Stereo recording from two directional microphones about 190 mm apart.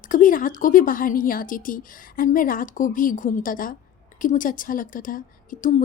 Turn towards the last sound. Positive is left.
turn(degrees=45)  # may be behind; listen again after turning